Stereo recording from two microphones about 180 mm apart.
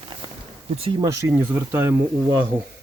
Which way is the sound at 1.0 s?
15° right (ahead or behind).